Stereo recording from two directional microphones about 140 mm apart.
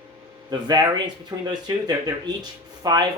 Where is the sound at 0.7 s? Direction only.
30° right (ahead or behind).